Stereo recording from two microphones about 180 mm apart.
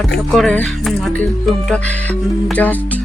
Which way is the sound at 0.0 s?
Centre (ahead or behind).